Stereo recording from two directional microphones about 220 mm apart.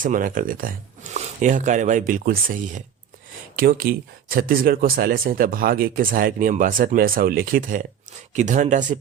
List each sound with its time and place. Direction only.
0.0 s speech: 40° right (ahead or behind)